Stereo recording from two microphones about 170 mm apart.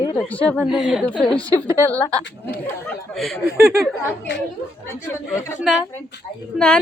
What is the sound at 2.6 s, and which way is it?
Speech, 15° left (ahead or behind).